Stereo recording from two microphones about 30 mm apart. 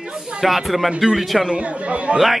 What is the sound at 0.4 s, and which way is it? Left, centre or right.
Speech, centre.